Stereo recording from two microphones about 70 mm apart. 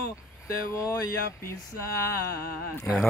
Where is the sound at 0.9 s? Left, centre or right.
Left.